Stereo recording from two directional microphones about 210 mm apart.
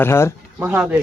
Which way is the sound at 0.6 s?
5° right (ahead or behind).